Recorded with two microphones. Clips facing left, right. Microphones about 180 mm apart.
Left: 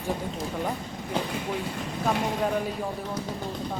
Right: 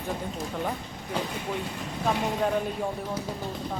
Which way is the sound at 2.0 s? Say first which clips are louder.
Even; centre (ahead or behind).